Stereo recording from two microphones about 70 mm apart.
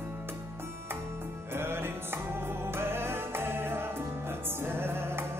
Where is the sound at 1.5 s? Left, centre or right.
Right.